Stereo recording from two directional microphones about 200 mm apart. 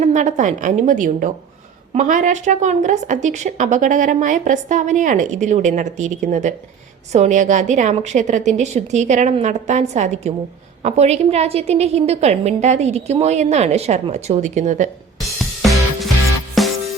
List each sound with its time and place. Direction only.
0.0 s a woman's voice: 35° right (ahead or behind)
15.4 s music: centre (ahead or behind)